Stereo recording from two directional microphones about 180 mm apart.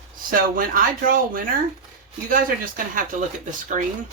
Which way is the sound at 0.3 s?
50° right (ahead or behind).